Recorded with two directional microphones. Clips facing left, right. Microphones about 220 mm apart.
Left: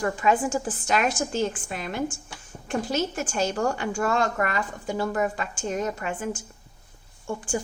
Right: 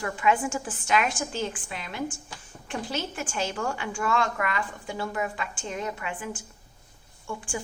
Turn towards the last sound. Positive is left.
turn(degrees=40)  # may be behind; listen again after turning